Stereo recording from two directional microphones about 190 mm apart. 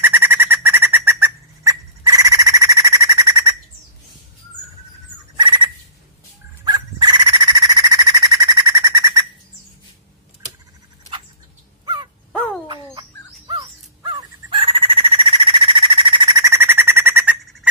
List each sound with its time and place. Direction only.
0.0 s bird: 10° right (ahead or behind)
5.4 s turkey: 25° right (ahead or behind)
6.6 s a sound: 20° right (ahead or behind)
11.8 s crow: 25° right (ahead or behind)
12.6 s fowl: 20° right (ahead or behind)
13.5 s a sound: 25° right (ahead or behind)
16.4 s bird: 10° right (ahead or behind)